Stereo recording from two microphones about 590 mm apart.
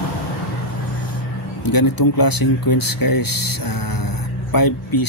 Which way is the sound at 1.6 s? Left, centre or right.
Left.